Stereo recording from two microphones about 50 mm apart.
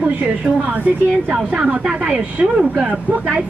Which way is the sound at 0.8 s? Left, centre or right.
Right.